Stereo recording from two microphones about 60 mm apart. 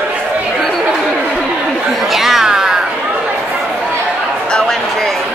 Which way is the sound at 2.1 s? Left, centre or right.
Centre.